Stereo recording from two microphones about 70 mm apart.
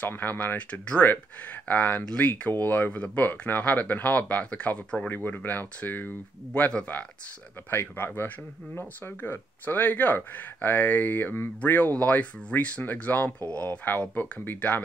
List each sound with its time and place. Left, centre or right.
0.0 s speech: left
5.1 s speech: left
7.7 s speech: left